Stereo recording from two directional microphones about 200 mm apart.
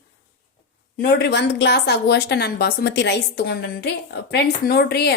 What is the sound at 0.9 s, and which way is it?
A woman's voice, 55° left (ahead or behind).